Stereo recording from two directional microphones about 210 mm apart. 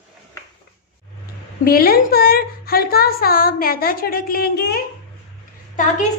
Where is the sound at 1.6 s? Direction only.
45° left (ahead or behind).